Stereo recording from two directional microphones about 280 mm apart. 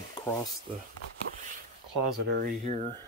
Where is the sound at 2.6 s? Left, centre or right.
Right.